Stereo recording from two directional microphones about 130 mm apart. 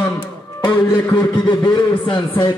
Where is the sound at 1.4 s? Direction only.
35° left (ahead or behind).